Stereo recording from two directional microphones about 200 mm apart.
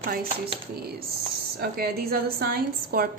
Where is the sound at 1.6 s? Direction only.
50° right (ahead or behind).